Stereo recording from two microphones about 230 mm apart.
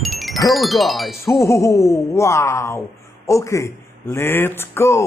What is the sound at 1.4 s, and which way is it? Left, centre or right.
Speech, centre.